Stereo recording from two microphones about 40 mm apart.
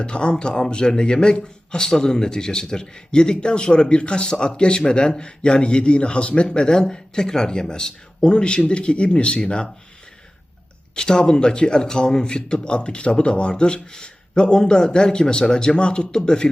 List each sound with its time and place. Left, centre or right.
0.0 s a man's voice: left
10.9 s a man's voice: centre